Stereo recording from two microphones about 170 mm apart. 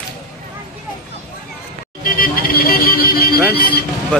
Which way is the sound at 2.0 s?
55° left (ahead or behind).